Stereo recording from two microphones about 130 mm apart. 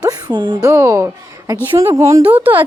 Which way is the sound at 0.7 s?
20° right (ahead or behind).